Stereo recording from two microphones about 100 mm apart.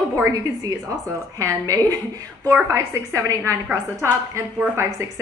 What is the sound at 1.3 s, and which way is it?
A woman's voice, 35° right (ahead or behind).